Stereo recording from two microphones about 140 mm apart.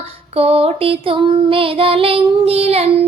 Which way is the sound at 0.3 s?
45° right (ahead or behind).